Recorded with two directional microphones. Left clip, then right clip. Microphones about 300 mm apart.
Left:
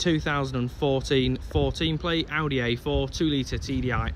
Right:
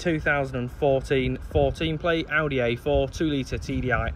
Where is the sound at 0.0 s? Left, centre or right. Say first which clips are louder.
Right 2 dB; centre.